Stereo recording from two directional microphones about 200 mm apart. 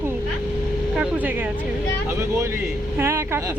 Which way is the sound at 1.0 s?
10° right (ahead or behind).